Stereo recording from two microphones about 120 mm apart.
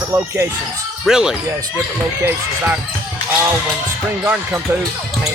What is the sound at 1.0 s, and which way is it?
Speech, 5° right (ahead or behind).